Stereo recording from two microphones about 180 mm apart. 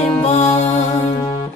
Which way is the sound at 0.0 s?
35° left (ahead or behind).